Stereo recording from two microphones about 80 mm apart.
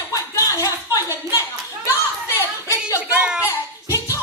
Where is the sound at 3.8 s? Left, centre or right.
Left.